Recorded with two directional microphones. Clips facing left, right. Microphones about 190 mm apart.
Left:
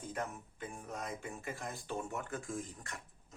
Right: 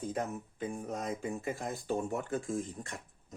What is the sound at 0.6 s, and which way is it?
Speech, 35° right (ahead or behind).